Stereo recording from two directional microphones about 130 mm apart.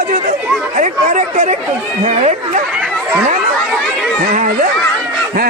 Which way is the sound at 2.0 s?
60° right (ahead or behind).